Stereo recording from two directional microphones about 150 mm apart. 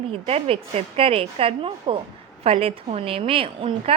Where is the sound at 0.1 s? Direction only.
40° right (ahead or behind).